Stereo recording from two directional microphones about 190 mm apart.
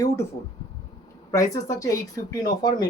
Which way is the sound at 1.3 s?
15° left (ahead or behind).